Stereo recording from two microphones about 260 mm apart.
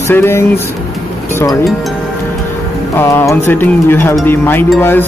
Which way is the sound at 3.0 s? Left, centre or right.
Centre.